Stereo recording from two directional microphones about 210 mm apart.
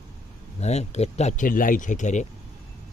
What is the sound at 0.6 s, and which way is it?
A man's voice, 30° left (ahead or behind).